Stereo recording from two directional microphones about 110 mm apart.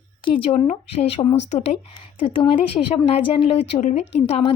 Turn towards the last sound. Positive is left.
turn(degrees=65)  # may be behind; listen again after turning